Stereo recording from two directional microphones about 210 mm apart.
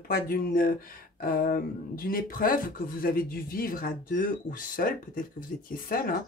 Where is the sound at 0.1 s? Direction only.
45° left (ahead or behind).